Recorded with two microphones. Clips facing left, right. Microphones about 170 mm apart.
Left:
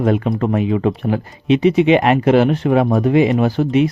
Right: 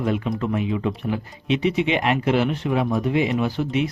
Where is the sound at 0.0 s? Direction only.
55° left (ahead or behind).